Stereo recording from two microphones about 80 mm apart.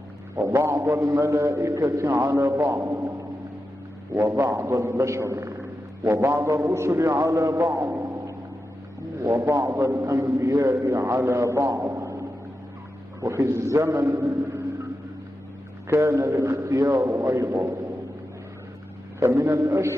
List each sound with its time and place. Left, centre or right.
0.4 s a man's voice: right
9.2 s a man's voice: right
15.9 s a man's voice: right
19.1 s a man's voice: right